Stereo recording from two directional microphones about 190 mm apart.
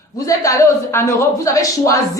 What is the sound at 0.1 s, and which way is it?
A man's voice, 15° left (ahead or behind).